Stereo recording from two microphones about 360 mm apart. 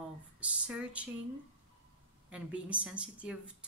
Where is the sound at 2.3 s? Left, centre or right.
Centre.